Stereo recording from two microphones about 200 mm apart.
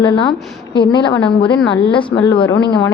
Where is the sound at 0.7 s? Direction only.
25° left (ahead or behind).